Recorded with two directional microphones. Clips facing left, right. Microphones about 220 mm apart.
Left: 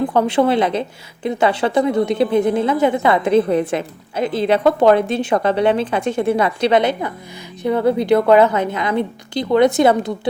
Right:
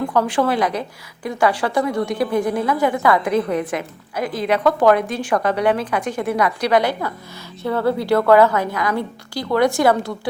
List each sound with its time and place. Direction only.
0.0 s a woman's voice: 25° left (ahead or behind)